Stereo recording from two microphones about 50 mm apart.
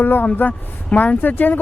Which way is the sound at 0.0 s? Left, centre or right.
Left.